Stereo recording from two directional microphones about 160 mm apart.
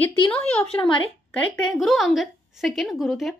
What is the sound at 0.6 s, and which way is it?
Speech, 40° left (ahead or behind).